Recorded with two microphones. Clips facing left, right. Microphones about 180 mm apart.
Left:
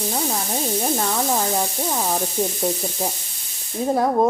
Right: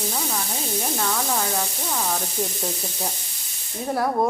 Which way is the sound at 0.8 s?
30° left (ahead or behind).